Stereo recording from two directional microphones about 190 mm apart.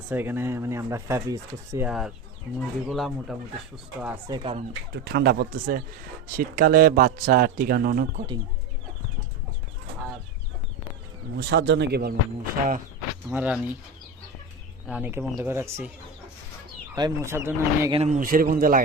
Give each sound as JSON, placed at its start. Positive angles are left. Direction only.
{"t": 0.1, "sound": "speech", "side_deg": -10}
{"t": 1.9, "sound": "speech", "side_deg": -5}
{"t": 4.3, "sound": "speech", "side_deg": -30}
{"t": 4.9, "sound": "a man's voice", "side_deg": -60}
{"t": 11.3, "sound": "speech", "side_deg": -60}
{"t": 13.3, "sound": "speech", "side_deg": -5}
{"t": 14.8, "sound": "speech", "side_deg": -5}
{"t": 16.9, "sound": "speech", "side_deg": -15}
{"t": 17.9, "sound": "a man's voice", "side_deg": -35}